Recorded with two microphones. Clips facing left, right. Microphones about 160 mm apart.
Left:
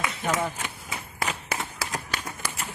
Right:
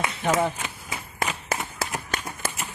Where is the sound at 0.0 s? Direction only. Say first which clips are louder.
Right 4 dB; 30° right (ahead or behind).